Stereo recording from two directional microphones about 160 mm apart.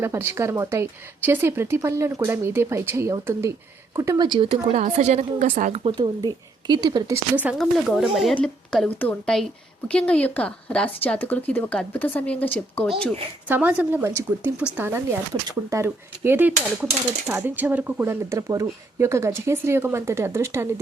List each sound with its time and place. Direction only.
0.0 s a woman's voice: 15° right (ahead or behind)
7.6 s speech: centre (ahead or behind)
13.5 s speech: 10° right (ahead or behind)